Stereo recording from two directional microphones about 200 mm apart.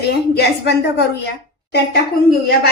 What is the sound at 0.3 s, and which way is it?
Speech, 55° left (ahead or behind).